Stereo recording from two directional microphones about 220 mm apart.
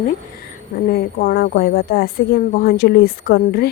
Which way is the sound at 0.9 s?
45° left (ahead or behind).